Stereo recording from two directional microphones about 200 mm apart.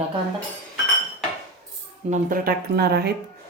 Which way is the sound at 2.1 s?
45° right (ahead or behind).